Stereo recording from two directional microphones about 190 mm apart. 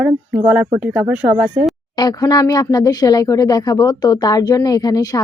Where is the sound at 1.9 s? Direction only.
20° left (ahead or behind).